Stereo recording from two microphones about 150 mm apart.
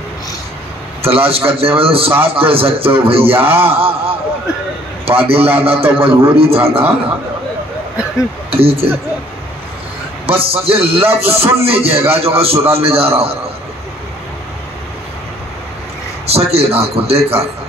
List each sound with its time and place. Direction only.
1.0 s a man's voice: 40° right (ahead or behind)
8.5 s speech: 40° right (ahead or behind)
10.2 s a man's voice: 40° right (ahead or behind)
16.3 s a man's voice: 40° right (ahead or behind)